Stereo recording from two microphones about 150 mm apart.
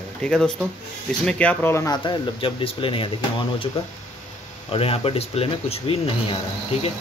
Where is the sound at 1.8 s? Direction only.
35° left (ahead or behind).